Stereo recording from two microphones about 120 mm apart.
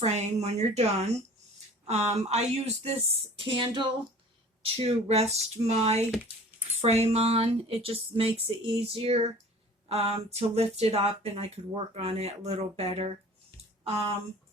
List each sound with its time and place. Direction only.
0.0 s speech: 65° right (ahead or behind); by 3.8 s 45° right (ahead or behind)
4.6 s speech: 55° right (ahead or behind)